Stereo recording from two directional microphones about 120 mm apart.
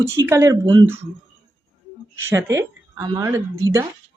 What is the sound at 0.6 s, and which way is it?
Speech, 40° right (ahead or behind).